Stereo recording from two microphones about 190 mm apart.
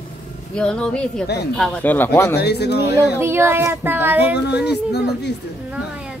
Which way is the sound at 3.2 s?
15° right (ahead or behind).